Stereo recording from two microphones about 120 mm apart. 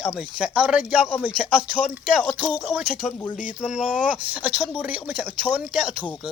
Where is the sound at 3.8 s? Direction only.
5° right (ahead or behind).